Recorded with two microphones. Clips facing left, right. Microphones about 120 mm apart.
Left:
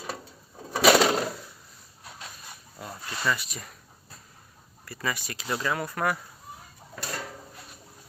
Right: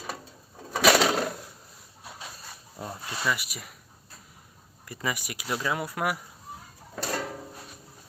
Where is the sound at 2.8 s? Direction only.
20° right (ahead or behind).